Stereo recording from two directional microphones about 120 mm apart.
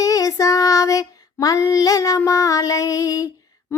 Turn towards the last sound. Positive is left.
turn(degrees=30)  # may be behind; listen again after turning